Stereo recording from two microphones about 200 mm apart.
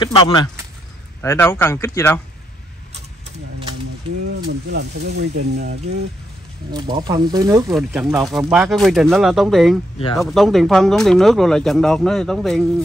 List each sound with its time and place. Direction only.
0.0 s speech: 20° left (ahead or behind)
1.2 s speech: 10° left (ahead or behind)
4.3 s speech: 60° right (ahead or behind)
6.7 s speech: 20° right (ahead or behind)
7.7 s speech: centre (ahead or behind)